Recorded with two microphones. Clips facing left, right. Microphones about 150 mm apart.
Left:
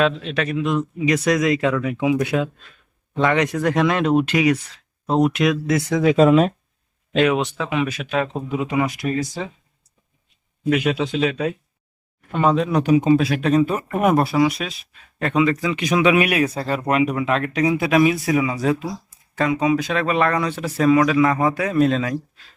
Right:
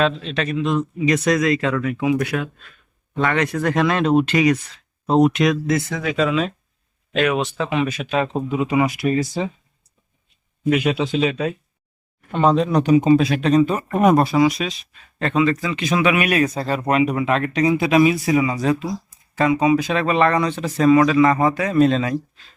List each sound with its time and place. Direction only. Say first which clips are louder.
0.0 s speech: even; 10° left (ahead or behind)
6.1 s speech: left 5 dB; 50° left (ahead or behind)
7.1 s speech: left 2 dB; 25° left (ahead or behind)
7.5 s speech: right 1 dB; 5° left (ahead or behind)
10.6 s speech: right 1 dB; 10° right (ahead or behind)